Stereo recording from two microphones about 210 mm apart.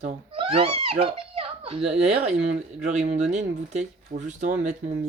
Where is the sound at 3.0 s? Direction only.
35° right (ahead or behind).